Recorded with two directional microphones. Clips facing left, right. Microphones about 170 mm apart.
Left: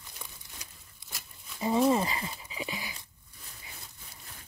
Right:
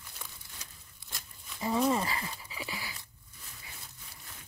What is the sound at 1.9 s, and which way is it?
Speech, 20° left (ahead or behind).